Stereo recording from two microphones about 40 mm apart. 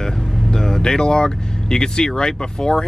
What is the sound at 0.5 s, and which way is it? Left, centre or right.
Speech, centre.